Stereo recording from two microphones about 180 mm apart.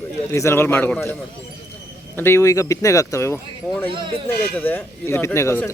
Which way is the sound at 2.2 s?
15° left (ahead or behind).